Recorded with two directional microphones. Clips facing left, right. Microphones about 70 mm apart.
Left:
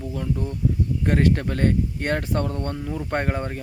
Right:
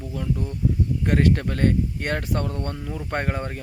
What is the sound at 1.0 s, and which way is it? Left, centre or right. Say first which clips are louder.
Speech: even; left.